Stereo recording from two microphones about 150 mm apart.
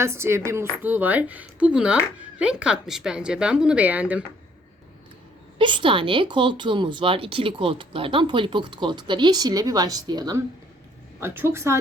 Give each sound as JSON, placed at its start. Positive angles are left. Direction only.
{"t": 0.0, "sound": "speech", "side_deg": -15}
{"t": 5.5, "sound": "speech", "side_deg": -35}